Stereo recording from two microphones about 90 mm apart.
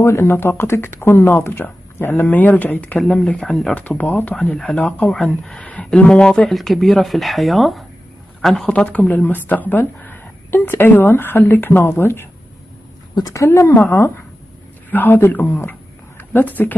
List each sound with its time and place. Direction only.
0.0 s speech: 30° left (ahead or behind)
4.4 s speech: 5° left (ahead or behind)
4.7 s speech: 15° left (ahead or behind)
13.5 s speech: 30° left (ahead or behind)
14.9 s speech: 20° left (ahead or behind)